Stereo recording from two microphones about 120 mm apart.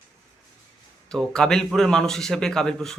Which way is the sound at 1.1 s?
5° left (ahead or behind).